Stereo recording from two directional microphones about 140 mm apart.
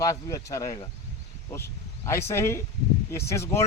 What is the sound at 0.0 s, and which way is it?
Speech, 25° left (ahead or behind).